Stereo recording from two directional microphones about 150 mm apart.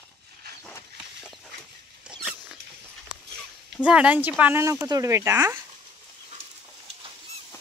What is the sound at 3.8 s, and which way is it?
Speech, 10° right (ahead or behind).